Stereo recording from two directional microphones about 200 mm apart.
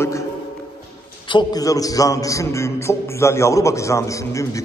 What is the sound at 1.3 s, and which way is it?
A man's voice, 20° left (ahead or behind).